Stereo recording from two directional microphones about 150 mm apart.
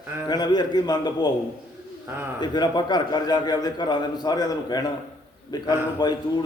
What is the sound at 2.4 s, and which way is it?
A man's voice, 30° left (ahead or behind).